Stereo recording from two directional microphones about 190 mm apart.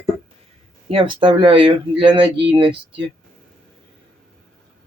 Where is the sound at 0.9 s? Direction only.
25° right (ahead or behind).